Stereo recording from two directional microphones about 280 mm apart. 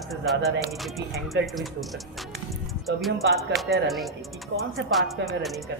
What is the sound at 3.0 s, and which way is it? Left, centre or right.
Music, centre.